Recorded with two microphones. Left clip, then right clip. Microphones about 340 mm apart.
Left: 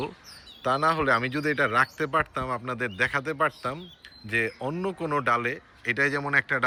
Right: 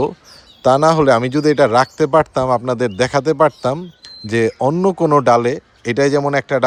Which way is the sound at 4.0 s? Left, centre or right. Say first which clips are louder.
Right 9 dB; centre.